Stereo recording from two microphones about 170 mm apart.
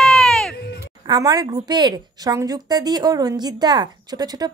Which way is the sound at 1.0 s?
20° right (ahead or behind).